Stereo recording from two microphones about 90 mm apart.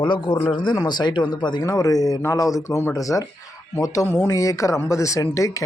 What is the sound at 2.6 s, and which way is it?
Speech, 30° left (ahead or behind).